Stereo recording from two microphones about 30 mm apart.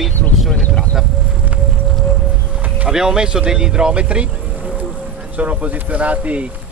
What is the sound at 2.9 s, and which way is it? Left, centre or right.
Speech, right.